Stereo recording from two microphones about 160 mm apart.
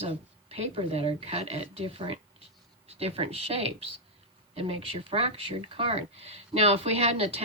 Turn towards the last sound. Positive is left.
turn(degrees=-40)  # may be behind; listen again after turning